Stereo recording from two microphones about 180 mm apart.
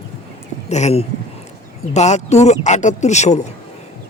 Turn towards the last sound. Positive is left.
turn(degrees=40)  # may be behind; listen again after turning